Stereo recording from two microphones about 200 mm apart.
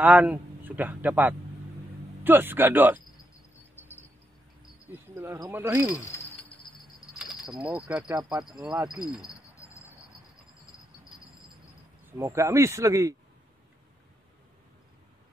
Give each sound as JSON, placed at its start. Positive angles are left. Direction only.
{"t": 0.0, "sound": "speech", "side_deg": -10}
{"t": 3.8, "sound": "mouse", "side_deg": 10}
{"t": 5.1, "sound": "speech", "side_deg": -10}
{"t": 7.4, "sound": "speech", "side_deg": -5}
{"t": 9.2, "sound": "cricket", "side_deg": 15}
{"t": 12.2, "sound": "speech", "side_deg": -15}